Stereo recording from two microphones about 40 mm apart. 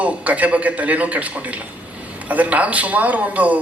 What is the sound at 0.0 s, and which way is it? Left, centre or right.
A man's voice, right.